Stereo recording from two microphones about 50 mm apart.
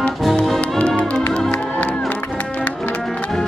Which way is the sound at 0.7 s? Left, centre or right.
Left.